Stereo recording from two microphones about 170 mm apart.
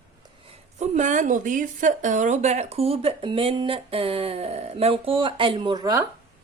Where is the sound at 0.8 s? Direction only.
45° right (ahead or behind); by 6.0 s 25° right (ahead or behind).